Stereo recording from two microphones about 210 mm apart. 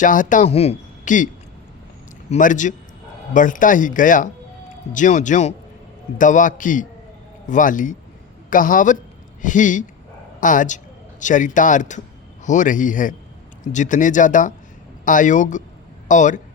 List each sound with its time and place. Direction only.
0.0 s speech: 40° left (ahead or behind)
2.3 s speech: 35° left (ahead or behind)